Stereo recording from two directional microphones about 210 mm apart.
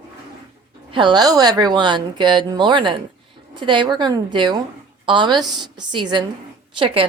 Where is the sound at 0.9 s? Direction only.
20° right (ahead or behind).